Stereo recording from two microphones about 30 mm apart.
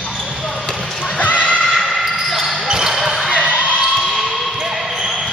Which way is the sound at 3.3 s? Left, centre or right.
Right.